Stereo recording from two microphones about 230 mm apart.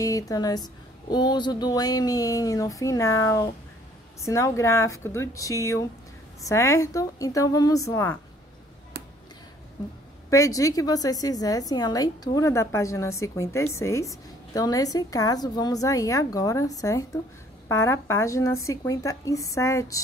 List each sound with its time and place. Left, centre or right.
0.0 s a woman's voice: centre
10.3 s a woman's voice: centre